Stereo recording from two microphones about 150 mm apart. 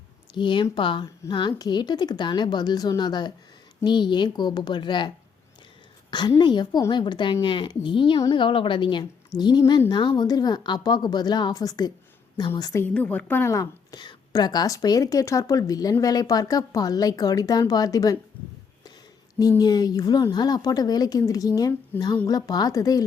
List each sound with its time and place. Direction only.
0.3 s a woman's voice: 30° left (ahead or behind)
12.8 s a woman's voice: 10° left (ahead or behind)
19.4 s a woman's voice: 25° left (ahead or behind)